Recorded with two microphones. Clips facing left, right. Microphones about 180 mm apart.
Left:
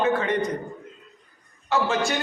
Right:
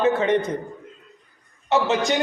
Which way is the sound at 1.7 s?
20° right (ahead or behind).